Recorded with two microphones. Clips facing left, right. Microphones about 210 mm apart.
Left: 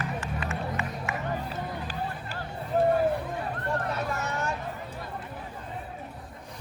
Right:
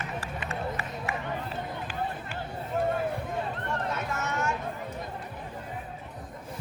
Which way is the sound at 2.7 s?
35° left (ahead or behind).